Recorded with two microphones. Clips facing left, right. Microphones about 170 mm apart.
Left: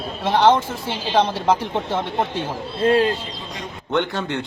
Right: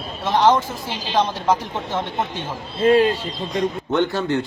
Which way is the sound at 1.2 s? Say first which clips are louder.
Left 1 dB; 30° left (ahead or behind).